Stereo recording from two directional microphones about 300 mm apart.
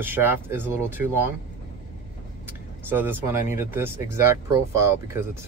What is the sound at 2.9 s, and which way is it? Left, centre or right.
Speech, centre.